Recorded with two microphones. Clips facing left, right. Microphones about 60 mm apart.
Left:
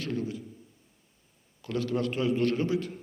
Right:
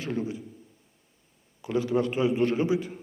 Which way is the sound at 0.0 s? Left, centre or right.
Centre.